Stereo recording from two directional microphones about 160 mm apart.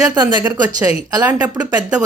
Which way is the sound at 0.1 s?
25° right (ahead or behind).